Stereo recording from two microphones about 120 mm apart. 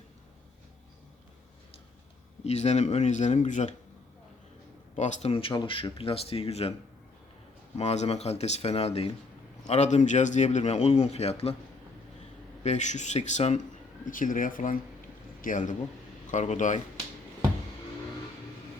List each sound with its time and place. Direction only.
2.4 s speech: 65° left (ahead or behind); by 3.8 s 80° left
4.9 s speech: 70° left (ahead or behind)
7.8 s speech: 65° left (ahead or behind)
9.6 s speech: 70° left (ahead or behind)
12.6 s speech: 75° left (ahead or behind)
14.0 s speech: 90° left
16.3 s speech: 80° left